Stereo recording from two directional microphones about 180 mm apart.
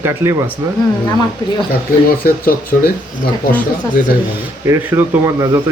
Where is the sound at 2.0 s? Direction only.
55° left (ahead or behind).